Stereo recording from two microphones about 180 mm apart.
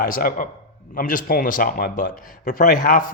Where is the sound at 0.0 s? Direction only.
50° left (ahead or behind).